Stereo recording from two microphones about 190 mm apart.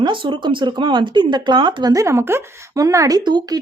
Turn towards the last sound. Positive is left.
turn(degrees=-20)  # may be behind; listen again after turning